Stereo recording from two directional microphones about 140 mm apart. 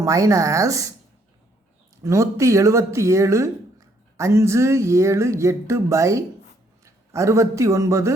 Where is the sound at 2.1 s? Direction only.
20° right (ahead or behind).